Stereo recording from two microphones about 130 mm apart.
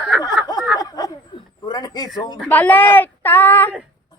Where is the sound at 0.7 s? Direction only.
30° left (ahead or behind).